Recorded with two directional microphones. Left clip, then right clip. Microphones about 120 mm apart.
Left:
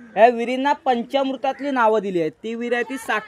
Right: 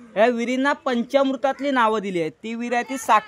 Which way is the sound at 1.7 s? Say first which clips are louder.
Left 6 dB; 25° right (ahead or behind).